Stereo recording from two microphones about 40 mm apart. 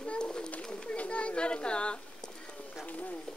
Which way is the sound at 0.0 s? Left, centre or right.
Left.